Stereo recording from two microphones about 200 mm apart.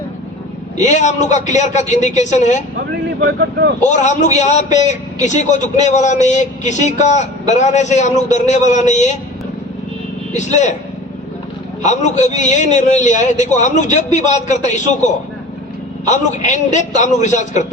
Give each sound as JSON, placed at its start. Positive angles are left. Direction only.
{"t": 0.8, "sound": "a man's voice", "side_deg": 35}
{"t": 3.2, "sound": "speech", "side_deg": -60}
{"t": 3.8, "sound": "a man's voice", "side_deg": 35}
{"t": 10.3, "sound": "a man's voice", "side_deg": 35}
{"t": 11.8, "sound": "a man's voice", "side_deg": 35}